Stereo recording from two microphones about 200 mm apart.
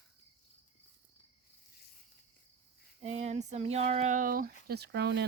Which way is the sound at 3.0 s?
35° right (ahead or behind).